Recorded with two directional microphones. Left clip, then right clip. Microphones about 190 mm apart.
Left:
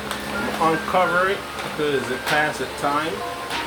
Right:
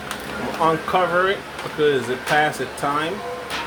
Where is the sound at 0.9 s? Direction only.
45° right (ahead or behind).